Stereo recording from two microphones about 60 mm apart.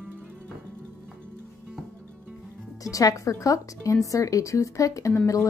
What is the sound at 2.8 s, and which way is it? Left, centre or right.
A woman's voice, left.